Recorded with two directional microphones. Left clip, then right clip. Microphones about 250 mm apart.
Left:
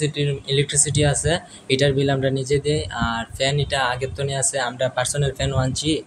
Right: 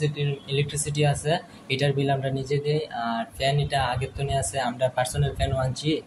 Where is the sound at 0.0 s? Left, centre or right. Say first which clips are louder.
Left 5 dB; left.